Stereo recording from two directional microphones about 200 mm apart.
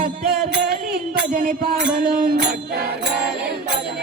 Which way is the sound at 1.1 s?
45° right (ahead or behind).